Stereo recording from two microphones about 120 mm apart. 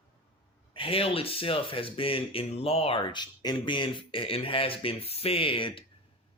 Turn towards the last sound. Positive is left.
turn(degrees=45)  # may be behind; listen again after turning